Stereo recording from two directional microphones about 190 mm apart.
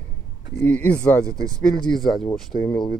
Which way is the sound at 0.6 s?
5° left (ahead or behind).